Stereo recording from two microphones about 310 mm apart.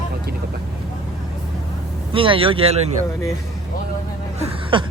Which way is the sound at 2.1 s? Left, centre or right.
Centre.